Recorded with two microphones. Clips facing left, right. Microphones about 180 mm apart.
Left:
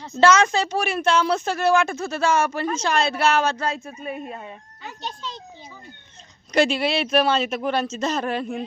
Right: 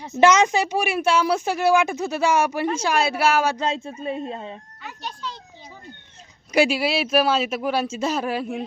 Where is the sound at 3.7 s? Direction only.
25° right (ahead or behind).